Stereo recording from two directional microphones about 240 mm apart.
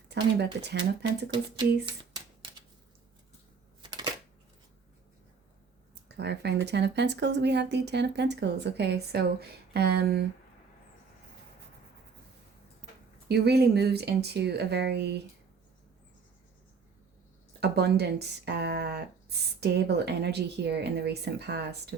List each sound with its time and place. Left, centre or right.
0.1 s speech: right
1.3 s speech: centre
3.8 s a sound: centre
5.9 s speech: right
13.2 s speech: right
17.6 s speech: right